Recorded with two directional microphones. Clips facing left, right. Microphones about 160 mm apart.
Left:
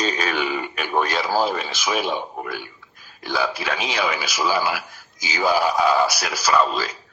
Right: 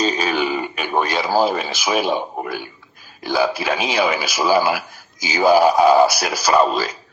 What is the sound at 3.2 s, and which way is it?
Speech, 10° right (ahead or behind).